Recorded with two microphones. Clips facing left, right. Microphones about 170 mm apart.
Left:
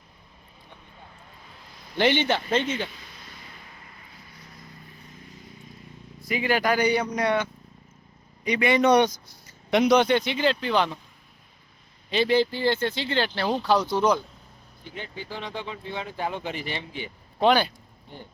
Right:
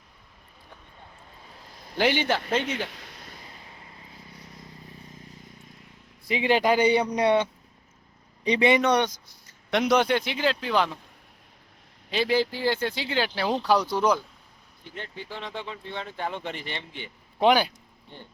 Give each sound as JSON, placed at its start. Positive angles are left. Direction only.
{"t": 2.0, "sound": "speech", "side_deg": -5}
{"t": 2.6, "sound": "speech", "side_deg": -70}
{"t": 3.7, "sound": "vehicle", "side_deg": -25}
{"t": 6.2, "sound": "a man's voice", "side_deg": -25}
{"t": 8.4, "sound": "a man's voice", "side_deg": -25}
{"t": 8.8, "sound": "speech", "side_deg": 10}
{"t": 9.7, "sound": "speech", "side_deg": 0}
{"t": 12.1, "sound": "speech", "side_deg": -5}
{"t": 14.8, "sound": "speech", "side_deg": 0}
{"t": 17.4, "sound": "speech", "side_deg": -10}